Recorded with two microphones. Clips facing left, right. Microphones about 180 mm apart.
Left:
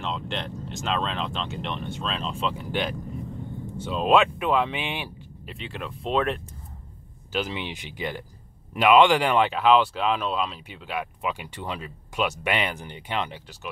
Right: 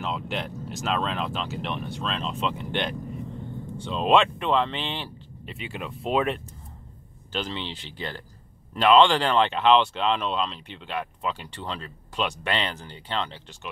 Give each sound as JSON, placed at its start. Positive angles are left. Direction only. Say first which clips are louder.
{"t": 0.0, "sound": "speech", "louder": "right 1 dB", "side_deg": -5}
{"t": 5.5, "sound": "speech", "louder": "even", "side_deg": -5}
{"t": 7.3, "sound": "speech", "louder": "left 2 dB", "side_deg": 10}